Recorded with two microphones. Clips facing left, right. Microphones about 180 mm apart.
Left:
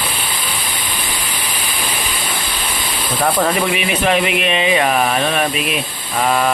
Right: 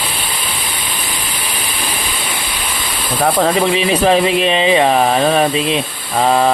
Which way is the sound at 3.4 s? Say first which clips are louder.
Right 3 dB; 30° right (ahead or behind).